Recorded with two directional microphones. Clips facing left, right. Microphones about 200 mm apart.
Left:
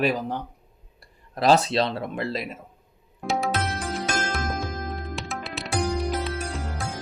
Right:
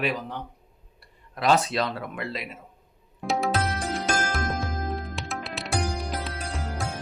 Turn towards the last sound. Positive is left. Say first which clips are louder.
# left 1 dB
turn(degrees=0)  # may be behind; listen again after turning